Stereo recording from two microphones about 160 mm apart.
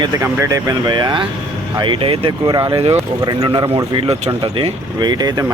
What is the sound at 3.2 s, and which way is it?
Speech, 25° right (ahead or behind).